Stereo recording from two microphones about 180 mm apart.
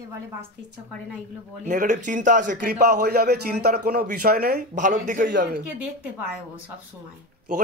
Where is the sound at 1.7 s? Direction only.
45° right (ahead or behind).